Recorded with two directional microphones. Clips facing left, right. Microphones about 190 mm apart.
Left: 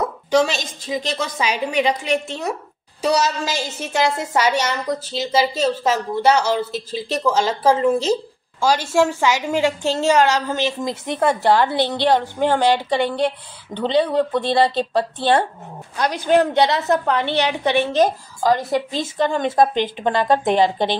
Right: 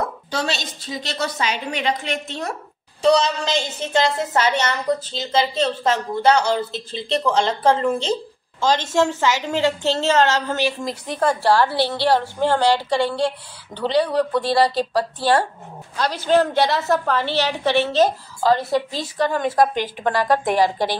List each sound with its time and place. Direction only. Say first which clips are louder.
0.6 s a woman's voice: left 5 dB; 10° left (ahead or behind)
3.0 s a woman's voice: right 2 dB; 5° left (ahead or behind); by 21.0 s 25° left (ahead or behind)